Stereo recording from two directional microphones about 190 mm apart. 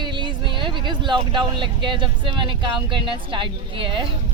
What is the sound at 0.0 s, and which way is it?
Speech, 25° right (ahead or behind).